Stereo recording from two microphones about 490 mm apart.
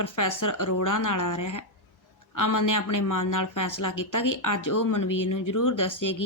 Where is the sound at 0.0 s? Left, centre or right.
Left.